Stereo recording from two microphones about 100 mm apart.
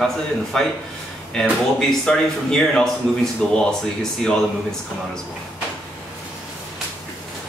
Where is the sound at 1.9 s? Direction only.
5° left (ahead or behind).